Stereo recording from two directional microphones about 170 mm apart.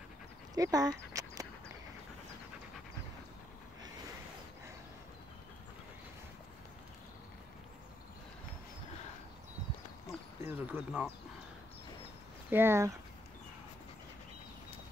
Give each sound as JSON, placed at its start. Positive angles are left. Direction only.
{"t": 0.6, "sound": "speech", "side_deg": -20}
{"t": 10.4, "sound": "speech", "side_deg": -10}
{"t": 12.4, "sound": "speech", "side_deg": -15}